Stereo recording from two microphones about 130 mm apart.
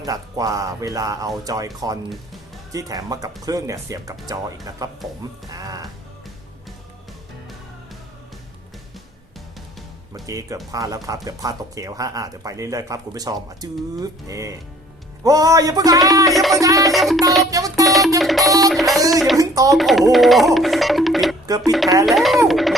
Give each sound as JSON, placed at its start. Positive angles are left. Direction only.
{"t": 0.0, "sound": "speech", "side_deg": -30}
{"t": 10.2, "sound": "speech", "side_deg": -25}
{"t": 16.2, "sound": "speech", "side_deg": 0}
{"t": 16.6, "sound": "speech", "side_deg": -25}
{"t": 16.8, "sound": "music", "side_deg": 0}
{"t": 17.5, "sound": "music", "side_deg": -25}
{"t": 17.8, "sound": "music", "side_deg": 0}
{"t": 19.4, "sound": "speech", "side_deg": -25}
{"t": 19.7, "sound": "speech", "side_deg": 0}